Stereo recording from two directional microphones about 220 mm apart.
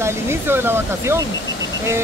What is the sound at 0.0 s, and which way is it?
Speech, 10° right (ahead or behind).